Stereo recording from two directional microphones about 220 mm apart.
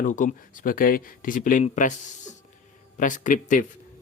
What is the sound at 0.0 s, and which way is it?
Speech, 35° left (ahead or behind).